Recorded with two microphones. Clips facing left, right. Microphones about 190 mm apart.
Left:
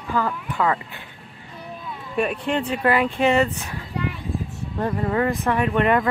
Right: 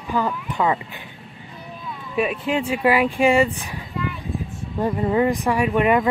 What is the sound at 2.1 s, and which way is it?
Speech, centre (ahead or behind).